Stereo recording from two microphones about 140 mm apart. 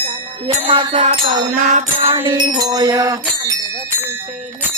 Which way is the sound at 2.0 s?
35° right (ahead or behind).